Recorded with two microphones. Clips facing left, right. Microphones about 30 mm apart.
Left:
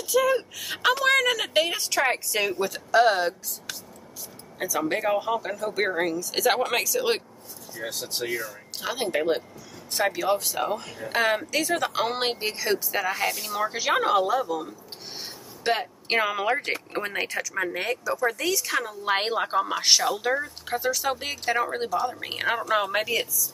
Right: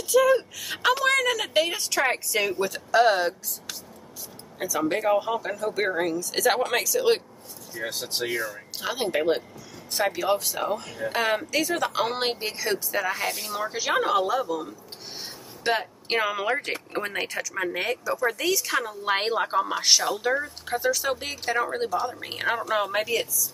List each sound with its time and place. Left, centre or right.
0.1 s speech: centre
7.7 s speech: centre
8.8 s speech: centre